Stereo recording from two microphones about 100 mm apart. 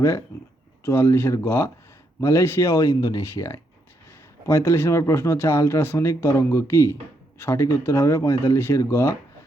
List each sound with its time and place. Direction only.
0.3 s speech: 25° left (ahead or behind)